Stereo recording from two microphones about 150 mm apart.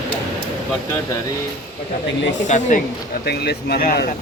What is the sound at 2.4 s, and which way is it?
Speech, 55° left (ahead or behind).